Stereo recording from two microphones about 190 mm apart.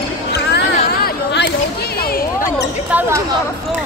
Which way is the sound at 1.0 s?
60° left (ahead or behind).